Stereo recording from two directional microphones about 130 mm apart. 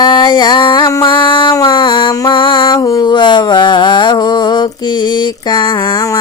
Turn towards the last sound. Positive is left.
turn(degrees=30)  # may be behind; listen again after turning